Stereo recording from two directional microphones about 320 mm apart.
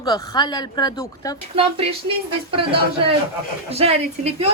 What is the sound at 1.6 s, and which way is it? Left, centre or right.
A woman's voice, centre.